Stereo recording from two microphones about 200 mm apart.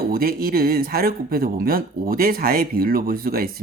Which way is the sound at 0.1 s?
50° right (ahead or behind).